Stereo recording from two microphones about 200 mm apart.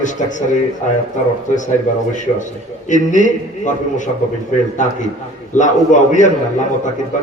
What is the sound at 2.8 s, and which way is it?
A man's voice, 40° left (ahead or behind).